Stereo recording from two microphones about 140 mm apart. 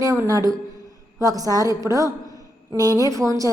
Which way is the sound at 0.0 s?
25° right (ahead or behind).